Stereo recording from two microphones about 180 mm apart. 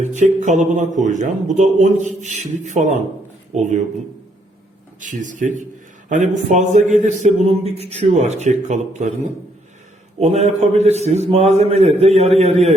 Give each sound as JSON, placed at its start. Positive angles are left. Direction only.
{"t": 0.1, "sound": "a man's voice", "side_deg": -40}
{"t": 4.9, "sound": "a man's voice", "side_deg": -45}
{"t": 10.2, "sound": "a man's voice", "side_deg": -40}